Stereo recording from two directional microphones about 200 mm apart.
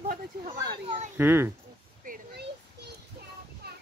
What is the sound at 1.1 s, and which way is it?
Speech, 10° right (ahead or behind).